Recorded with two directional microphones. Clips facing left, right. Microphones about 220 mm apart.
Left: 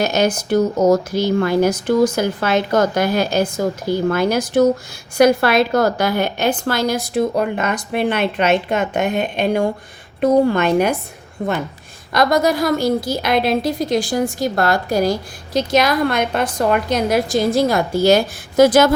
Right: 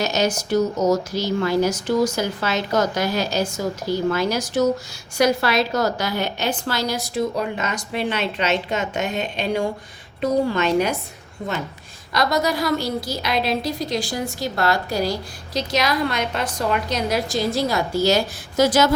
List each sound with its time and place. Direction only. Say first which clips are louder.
0.0 s speech: left 4 dB; 55° left (ahead or behind)
12.1 s a woman's voice: left 5 dB; 50° left (ahead or behind)